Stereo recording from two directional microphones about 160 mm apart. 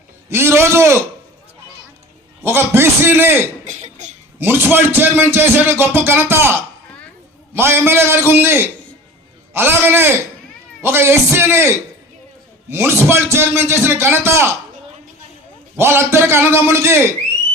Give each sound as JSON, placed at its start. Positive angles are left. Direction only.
{"t": 0.3, "sound": "speech", "side_deg": -15}
{"t": 2.4, "sound": "speech", "side_deg": -15}
{"t": 3.7, "sound": "cough", "side_deg": -50}
{"t": 4.4, "sound": "speech", "side_deg": -15}
{"t": 7.5, "sound": "speech", "side_deg": -15}
{"t": 12.7, "sound": "speech", "side_deg": -15}
{"t": 15.8, "sound": "speech", "side_deg": -15}